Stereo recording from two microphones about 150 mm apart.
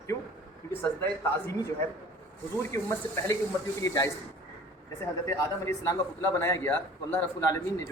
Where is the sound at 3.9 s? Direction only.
20° left (ahead or behind).